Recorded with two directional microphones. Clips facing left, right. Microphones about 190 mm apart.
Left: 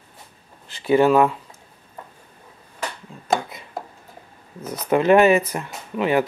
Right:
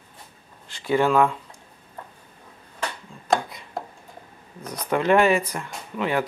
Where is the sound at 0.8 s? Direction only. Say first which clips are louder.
Left 4 dB; 20° left (ahead or behind).